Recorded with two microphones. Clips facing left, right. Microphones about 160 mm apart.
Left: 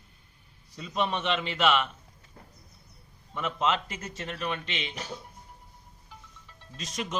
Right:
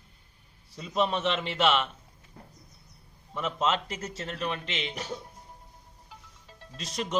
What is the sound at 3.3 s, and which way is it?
Speech, centre (ahead or behind).